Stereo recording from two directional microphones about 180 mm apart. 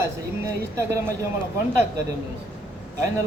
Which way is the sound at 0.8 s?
15° right (ahead or behind).